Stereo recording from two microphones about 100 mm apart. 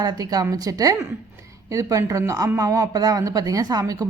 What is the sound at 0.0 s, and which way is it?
Speech, 40° right (ahead or behind).